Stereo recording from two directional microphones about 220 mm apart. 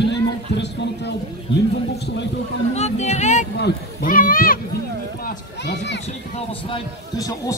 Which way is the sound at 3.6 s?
40° left (ahead or behind).